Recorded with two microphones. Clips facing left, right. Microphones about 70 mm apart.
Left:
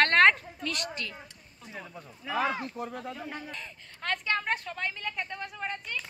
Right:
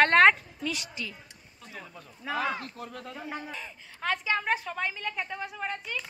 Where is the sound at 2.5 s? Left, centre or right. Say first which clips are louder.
Left 3 dB; centre.